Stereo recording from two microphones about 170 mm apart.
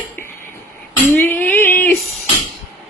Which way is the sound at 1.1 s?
10° left (ahead or behind).